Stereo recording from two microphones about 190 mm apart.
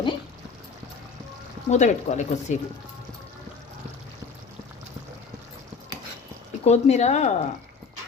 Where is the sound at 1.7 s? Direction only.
40° left (ahead or behind).